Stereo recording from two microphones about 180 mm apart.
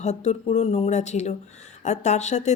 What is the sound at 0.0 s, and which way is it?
Speech, 40° left (ahead or behind).